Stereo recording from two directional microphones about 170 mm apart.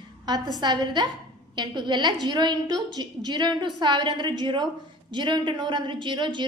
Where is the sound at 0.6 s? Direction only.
25° right (ahead or behind).